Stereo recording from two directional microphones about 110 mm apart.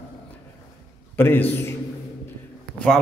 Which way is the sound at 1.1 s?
20° left (ahead or behind).